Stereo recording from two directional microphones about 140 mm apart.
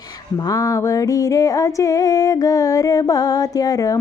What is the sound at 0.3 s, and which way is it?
Female singing, 25° left (ahead or behind).